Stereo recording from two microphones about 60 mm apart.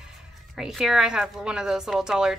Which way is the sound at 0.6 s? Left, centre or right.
Centre.